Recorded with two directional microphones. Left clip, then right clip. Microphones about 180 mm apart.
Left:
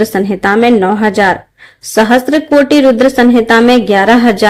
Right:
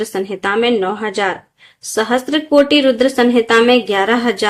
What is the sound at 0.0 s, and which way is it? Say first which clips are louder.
A woman's voice: left 7 dB; 40° left (ahead or behind).